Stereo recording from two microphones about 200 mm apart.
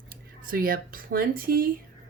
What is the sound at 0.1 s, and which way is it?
Speech, 45° right (ahead or behind).